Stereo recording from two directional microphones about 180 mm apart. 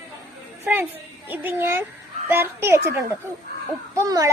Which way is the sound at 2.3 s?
15° right (ahead or behind).